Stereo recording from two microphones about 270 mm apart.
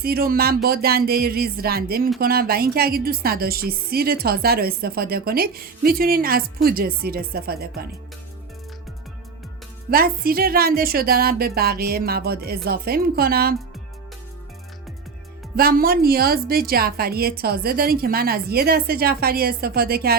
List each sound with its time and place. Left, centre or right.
0.0 s a woman's voice: right
9.9 s a woman's voice: right
15.5 s a woman's voice: right